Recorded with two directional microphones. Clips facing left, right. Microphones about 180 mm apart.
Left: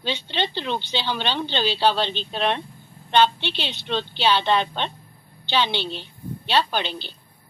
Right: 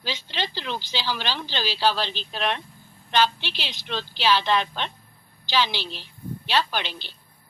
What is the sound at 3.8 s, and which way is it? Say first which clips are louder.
A woman's voice: left 2 dB; 25° left (ahead or behind).